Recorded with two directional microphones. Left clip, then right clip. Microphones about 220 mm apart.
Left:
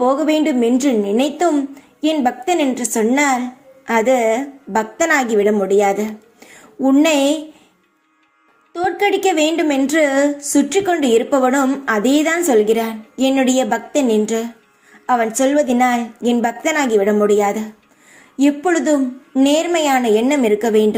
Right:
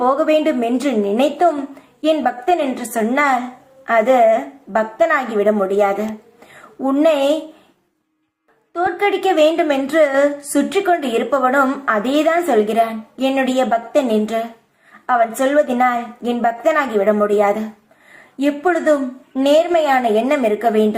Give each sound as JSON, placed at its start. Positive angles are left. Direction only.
{"t": 0.0, "sound": "a woman's voice", "side_deg": 30}
{"t": 8.7, "sound": "a woman's voice", "side_deg": 30}